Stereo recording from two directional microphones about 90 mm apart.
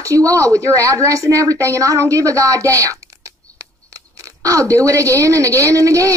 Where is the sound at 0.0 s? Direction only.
35° right (ahead or behind).